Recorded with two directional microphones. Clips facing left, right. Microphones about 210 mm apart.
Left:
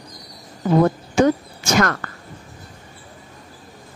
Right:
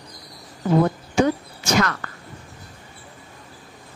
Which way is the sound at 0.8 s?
45° left (ahead or behind).